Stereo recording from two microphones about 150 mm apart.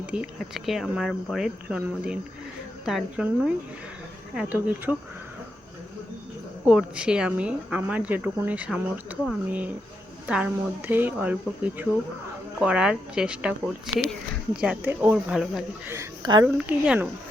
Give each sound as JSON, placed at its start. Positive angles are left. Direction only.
{"t": 0.0, "sound": "speech", "side_deg": -5}
{"t": 6.7, "sound": "speech", "side_deg": -5}
{"t": 15.9, "sound": "a woman's voice", "side_deg": -20}
{"t": 16.6, "sound": "speech", "side_deg": -10}